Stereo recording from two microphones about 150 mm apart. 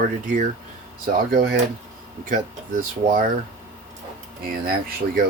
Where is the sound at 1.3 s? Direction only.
90° right.